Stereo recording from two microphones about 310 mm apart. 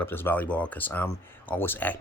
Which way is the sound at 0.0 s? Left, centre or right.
Centre.